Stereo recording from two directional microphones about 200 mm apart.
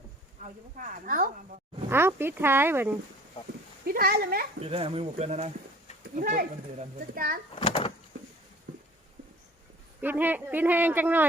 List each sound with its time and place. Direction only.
0.8 s a child's voice: 45° right (ahead or behind)
1.9 s speech: 10° right (ahead or behind)
3.8 s a child's voice: 50° right (ahead or behind)
4.6 s speech: 30° right (ahead or behind)
6.1 s a child's voice: 45° right (ahead or behind)
7.6 s door: 25° left (ahead or behind)
10.0 s speech: 10° right (ahead or behind)